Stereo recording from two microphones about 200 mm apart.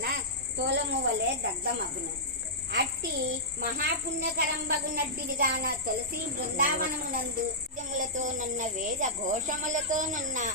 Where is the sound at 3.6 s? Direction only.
50° right (ahead or behind).